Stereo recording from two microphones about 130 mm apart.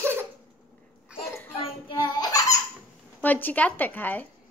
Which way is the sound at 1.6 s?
35° left (ahead or behind).